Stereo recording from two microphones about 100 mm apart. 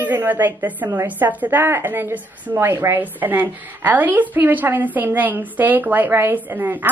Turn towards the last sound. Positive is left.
turn(degrees=-20)  # may be behind; listen again after turning